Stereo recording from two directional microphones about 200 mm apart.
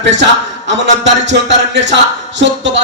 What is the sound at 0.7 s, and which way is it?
A man's voice, 65° right (ahead or behind).